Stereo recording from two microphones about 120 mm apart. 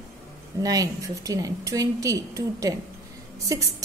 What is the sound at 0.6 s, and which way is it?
A woman's voice, 30° right (ahead or behind).